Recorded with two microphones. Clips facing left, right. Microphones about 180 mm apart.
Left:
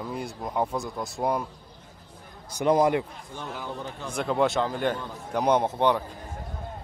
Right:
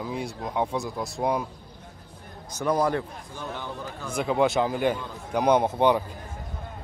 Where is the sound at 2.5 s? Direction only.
20° left (ahead or behind).